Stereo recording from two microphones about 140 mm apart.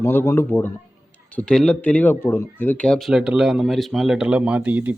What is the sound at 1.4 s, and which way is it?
Speech, 5° left (ahead or behind).